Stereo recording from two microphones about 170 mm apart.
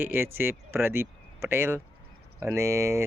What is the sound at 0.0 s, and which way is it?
Speech, 10° right (ahead or behind).